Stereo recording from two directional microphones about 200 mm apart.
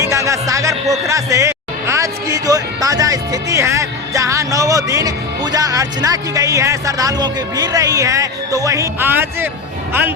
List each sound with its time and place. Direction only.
0.0 s speech: 15° right (ahead or behind)